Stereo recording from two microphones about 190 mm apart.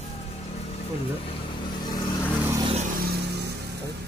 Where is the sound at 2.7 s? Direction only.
50° right (ahead or behind).